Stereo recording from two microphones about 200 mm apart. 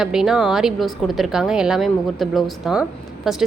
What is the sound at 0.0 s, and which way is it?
A woman's voice, 5° right (ahead or behind).